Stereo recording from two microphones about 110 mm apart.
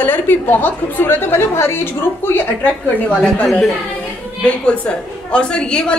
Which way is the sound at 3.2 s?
5° left (ahead or behind).